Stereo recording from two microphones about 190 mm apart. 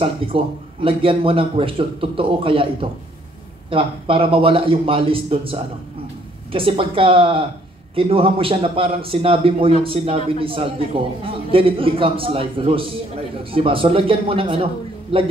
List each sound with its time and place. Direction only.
0.0 s a man's voice: 30° right (ahead or behind)